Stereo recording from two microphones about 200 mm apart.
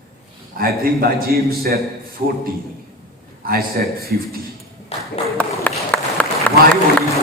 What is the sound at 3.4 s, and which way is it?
Speech, 50° right (ahead or behind).